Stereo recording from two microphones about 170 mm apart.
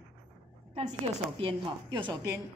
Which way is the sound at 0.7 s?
35° right (ahead or behind).